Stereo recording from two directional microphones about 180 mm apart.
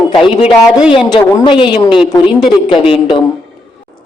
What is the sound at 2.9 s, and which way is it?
Speech, 25° left (ahead or behind).